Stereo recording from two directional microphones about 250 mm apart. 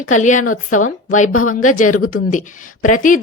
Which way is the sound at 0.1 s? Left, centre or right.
Left.